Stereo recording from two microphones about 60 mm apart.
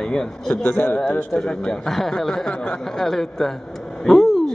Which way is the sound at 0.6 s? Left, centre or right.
Left.